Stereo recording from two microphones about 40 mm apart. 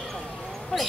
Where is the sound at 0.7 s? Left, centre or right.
Centre.